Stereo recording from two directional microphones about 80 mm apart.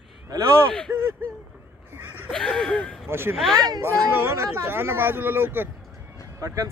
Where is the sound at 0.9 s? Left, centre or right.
Right.